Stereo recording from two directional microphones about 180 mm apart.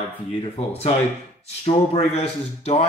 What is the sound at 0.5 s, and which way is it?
Speech, 35° left (ahead or behind).